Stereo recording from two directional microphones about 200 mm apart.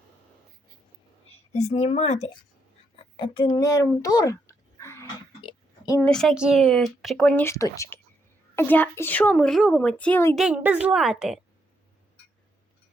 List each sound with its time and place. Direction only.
1.3 s a woman's voice: 35° left (ahead or behind)
3.3 s a child's voice: 25° left (ahead or behind)
5.4 s oink: 20° left (ahead or behind)
6.1 s a woman's voice: centre (ahead or behind)
10.3 s speech: 5° right (ahead or behind)